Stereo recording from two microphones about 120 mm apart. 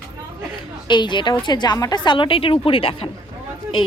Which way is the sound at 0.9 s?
40° left (ahead or behind).